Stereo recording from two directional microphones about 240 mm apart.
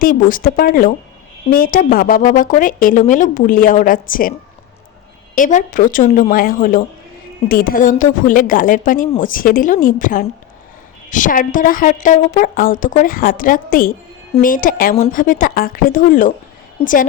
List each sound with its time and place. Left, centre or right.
0.0 s speech: left